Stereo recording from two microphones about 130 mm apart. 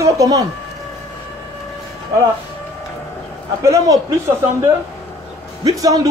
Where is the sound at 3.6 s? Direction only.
25° right (ahead or behind).